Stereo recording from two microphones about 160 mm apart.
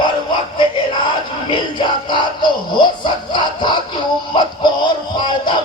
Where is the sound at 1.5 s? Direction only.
30° left (ahead or behind).